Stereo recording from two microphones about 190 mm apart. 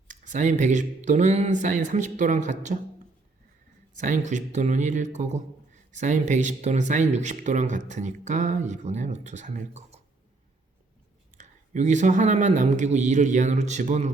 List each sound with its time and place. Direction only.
0.1 s speech: 40° right (ahead or behind)
3.9 s speech: 40° right (ahead or behind)
11.3 s speech: 40° right (ahead or behind)